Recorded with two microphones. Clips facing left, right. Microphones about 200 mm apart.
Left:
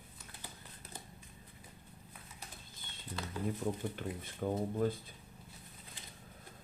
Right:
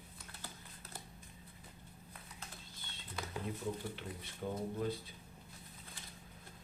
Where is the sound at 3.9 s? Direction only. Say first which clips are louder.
Left 5 dB; 50° left (ahead or behind).